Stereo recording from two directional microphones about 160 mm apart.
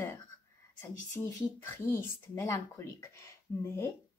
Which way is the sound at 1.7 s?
15° left (ahead or behind).